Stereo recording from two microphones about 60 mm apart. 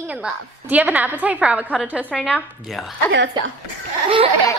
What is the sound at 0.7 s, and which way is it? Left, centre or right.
Speech, right.